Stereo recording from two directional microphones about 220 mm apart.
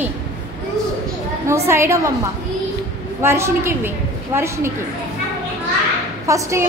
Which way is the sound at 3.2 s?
10° right (ahead or behind).